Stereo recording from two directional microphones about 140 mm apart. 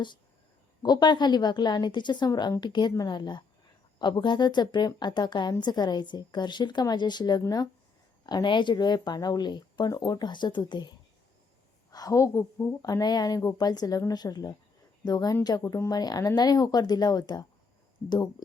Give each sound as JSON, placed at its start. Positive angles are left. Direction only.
{"t": 0.8, "sound": "a woman's voice", "side_deg": 30}